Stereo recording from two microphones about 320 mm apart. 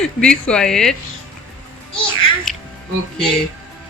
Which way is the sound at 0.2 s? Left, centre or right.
Centre.